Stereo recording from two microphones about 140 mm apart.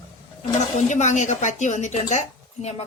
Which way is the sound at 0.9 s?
60° left (ahead or behind).